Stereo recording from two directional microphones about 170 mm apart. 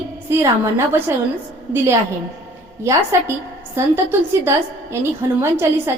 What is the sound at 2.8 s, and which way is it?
A woman's voice, 15° right (ahead or behind).